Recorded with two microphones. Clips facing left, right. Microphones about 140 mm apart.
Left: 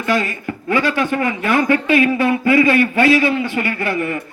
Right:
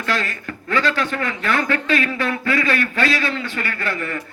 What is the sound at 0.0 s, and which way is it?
A man's voice, 15° left (ahead or behind).